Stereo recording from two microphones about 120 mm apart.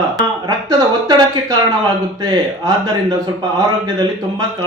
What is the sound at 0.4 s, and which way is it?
A man's voice, 30° right (ahead or behind).